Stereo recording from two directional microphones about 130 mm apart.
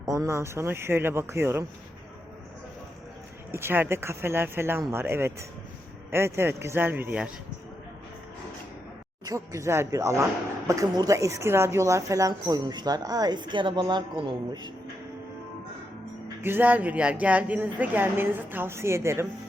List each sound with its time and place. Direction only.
0.0 s speech: 25° right (ahead or behind)
3.5 s speech: 15° right (ahead or behind)
9.2 s speech: 25° right (ahead or behind)
16.4 s speech: 15° right (ahead or behind)